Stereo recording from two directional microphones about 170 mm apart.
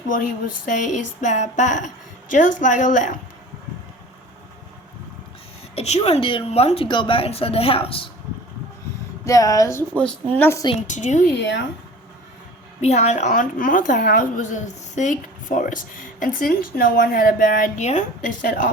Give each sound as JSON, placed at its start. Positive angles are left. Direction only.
{"t": 0.6, "sound": "a woman's voice", "side_deg": 45}
{"t": 5.7, "sound": "a woman's voice", "side_deg": 40}
{"t": 9.2, "sound": "a woman's voice", "side_deg": 20}
{"t": 10.8, "sound": "a woman's voice", "side_deg": 45}
{"t": 11.3, "sound": "speech", "side_deg": 90}
{"t": 12.8, "sound": "a woman's voice", "side_deg": 40}